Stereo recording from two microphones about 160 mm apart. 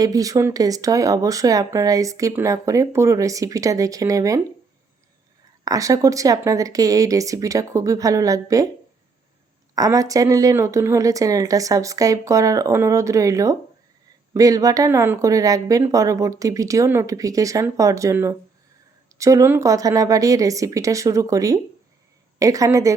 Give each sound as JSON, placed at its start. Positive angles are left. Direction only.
{"t": 0.0, "sound": "speech", "side_deg": -20}
{"t": 5.6, "sound": "speech", "side_deg": -20}
{"t": 9.7, "sound": "speech", "side_deg": -20}